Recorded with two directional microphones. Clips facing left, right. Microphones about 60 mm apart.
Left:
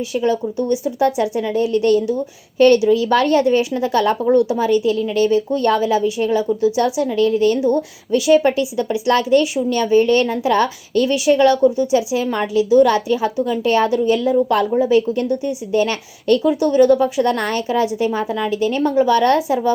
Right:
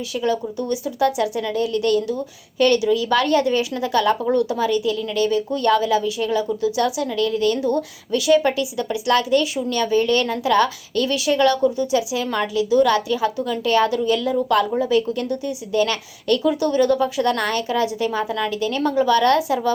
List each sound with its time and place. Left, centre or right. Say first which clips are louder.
0.1 s speech: left 2 dB; left